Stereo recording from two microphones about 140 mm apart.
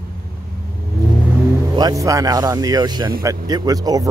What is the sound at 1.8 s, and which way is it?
A man's voice, 25° right (ahead or behind).